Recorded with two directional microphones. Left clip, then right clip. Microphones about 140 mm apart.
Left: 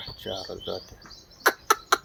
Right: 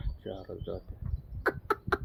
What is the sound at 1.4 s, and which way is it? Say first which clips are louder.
Chicken: left 8 dB; 20° right (ahead or behind).